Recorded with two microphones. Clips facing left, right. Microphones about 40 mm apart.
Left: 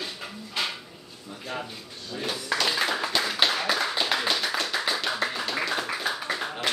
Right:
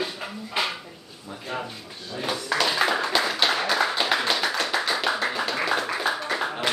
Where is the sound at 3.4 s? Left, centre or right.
Centre.